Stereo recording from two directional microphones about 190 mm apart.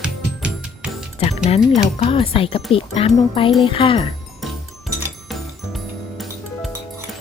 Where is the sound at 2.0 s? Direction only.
30° left (ahead or behind).